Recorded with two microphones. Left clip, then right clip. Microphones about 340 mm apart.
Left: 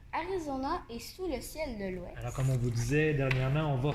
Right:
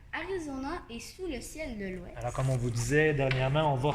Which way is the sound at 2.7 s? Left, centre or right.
Right.